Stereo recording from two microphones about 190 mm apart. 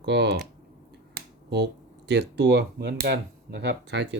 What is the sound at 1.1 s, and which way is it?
Finger snapping, 60° right (ahead or behind).